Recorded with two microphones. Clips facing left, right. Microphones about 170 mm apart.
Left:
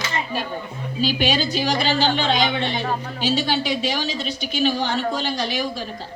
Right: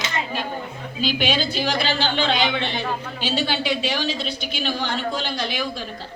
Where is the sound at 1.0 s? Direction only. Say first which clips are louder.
Left 1 dB; 40° left (ahead or behind).